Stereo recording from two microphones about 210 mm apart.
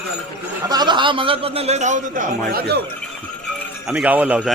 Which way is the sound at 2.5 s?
50° right (ahead or behind).